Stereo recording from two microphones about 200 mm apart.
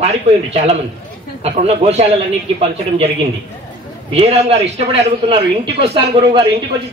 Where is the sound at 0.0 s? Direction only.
30° right (ahead or behind).